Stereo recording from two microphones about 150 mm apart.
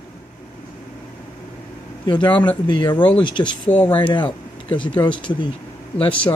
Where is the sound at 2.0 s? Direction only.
30° left (ahead or behind).